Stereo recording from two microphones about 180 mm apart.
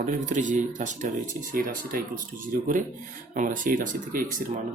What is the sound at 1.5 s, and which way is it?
Speech, 55° right (ahead or behind).